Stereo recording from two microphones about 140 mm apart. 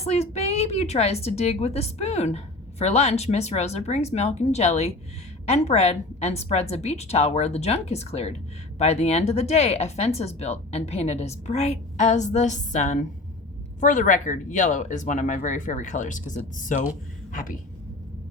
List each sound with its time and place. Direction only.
0.0 s a woman's voice: 50° left (ahead or behind); by 16.9 s 65° left (ahead or behind)